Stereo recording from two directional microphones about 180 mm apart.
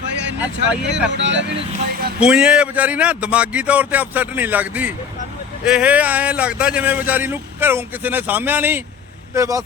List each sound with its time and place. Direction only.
0.3 s speech: 10° right (ahead or behind)
1.1 s speech: 80° right
2.2 s speech: 5° right (ahead or behind)